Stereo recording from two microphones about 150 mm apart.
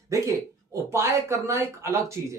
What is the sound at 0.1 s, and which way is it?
Speech, 20° right (ahead or behind).